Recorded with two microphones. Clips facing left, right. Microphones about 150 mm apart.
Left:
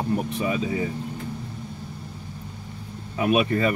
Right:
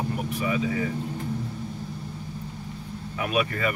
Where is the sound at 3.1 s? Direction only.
25° left (ahead or behind).